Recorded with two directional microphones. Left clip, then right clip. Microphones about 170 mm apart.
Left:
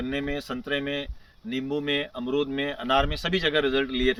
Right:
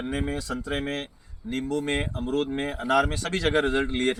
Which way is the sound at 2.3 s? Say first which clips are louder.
Left 1 dB; 25° left (ahead or behind).